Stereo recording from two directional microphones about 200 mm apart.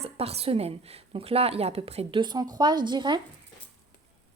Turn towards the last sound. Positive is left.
turn(degrees=-20)  # may be behind; listen again after turning